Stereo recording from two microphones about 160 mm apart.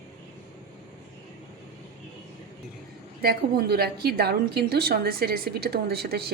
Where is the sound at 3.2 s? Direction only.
75° right (ahead or behind).